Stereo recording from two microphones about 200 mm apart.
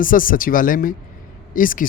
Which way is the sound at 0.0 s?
45° left (ahead or behind).